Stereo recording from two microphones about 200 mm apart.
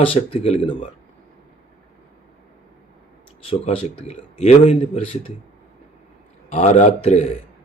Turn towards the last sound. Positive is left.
turn(degrees=35)  # may be behind; listen again after turning